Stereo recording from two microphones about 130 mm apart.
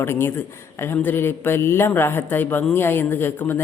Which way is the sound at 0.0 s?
20° left (ahead or behind).